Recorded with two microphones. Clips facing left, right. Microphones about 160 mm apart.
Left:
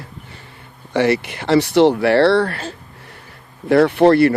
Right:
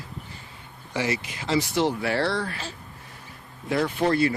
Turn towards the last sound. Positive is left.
turn(degrees=65)  # may be behind; listen again after turning